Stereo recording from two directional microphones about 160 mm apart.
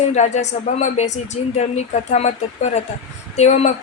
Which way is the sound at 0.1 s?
45° left (ahead or behind).